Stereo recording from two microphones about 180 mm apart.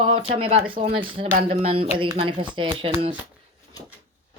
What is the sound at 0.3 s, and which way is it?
Speech, 35° right (ahead or behind).